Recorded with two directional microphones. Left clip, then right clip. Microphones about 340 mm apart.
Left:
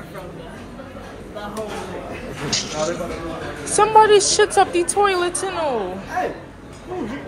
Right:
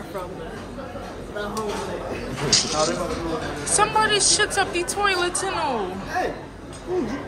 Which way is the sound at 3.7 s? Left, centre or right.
Centre.